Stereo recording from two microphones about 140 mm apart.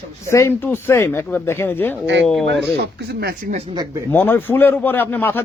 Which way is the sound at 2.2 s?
Centre (ahead or behind).